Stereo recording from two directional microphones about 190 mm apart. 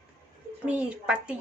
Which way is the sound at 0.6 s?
5° right (ahead or behind).